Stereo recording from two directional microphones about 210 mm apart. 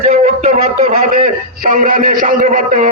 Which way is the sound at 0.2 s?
30° right (ahead or behind).